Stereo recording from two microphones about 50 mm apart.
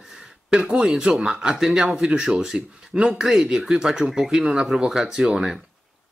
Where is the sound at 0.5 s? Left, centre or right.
Centre.